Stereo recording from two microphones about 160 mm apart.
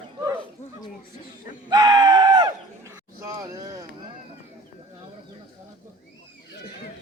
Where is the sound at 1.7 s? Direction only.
20° right (ahead or behind).